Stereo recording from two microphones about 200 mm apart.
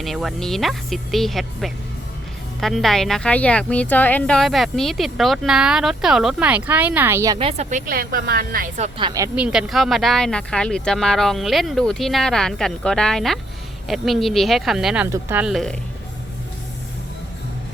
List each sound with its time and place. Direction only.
0.0 s a woman's voice: centre (ahead or behind)
7.3 s speech: 30° right (ahead or behind)
9.0 s speech: 20° right (ahead or behind)
9.3 s a woman's voice: 5° right (ahead or behind)